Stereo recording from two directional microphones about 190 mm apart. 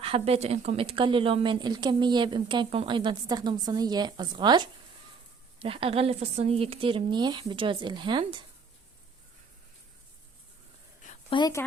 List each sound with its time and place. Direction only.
0.0 s speech: 30° right (ahead or behind)
11.3 s speech: 20° left (ahead or behind)